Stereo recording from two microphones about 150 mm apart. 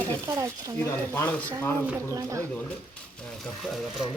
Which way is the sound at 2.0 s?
20° right (ahead or behind).